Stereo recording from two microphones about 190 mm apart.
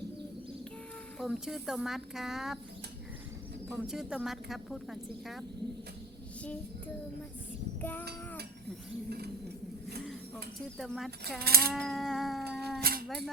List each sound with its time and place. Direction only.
1.2 s speech: centre (ahead or behind)
3.8 s speech: 5° right (ahead or behind)
6.4 s child singing: 5° left (ahead or behind)
7.8 s a sound: 10° left (ahead or behind)
9.0 s rodents: 60° right (ahead or behind)
10.0 s speech: centre (ahead or behind)
11.3 s rodents: 55° right (ahead or behind)
11.7 s a sound: centre (ahead or behind)
12.8 s a sound: 50° right (ahead or behind)
13.1 s speech: centre (ahead or behind)